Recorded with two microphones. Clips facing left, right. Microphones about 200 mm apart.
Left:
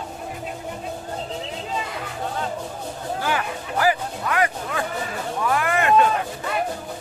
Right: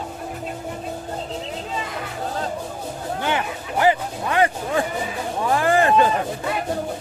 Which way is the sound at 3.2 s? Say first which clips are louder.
Right 1 dB; 20° right (ahead or behind).